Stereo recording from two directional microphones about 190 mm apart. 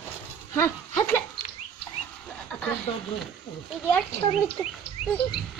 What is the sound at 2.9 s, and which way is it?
Speech, 30° left (ahead or behind).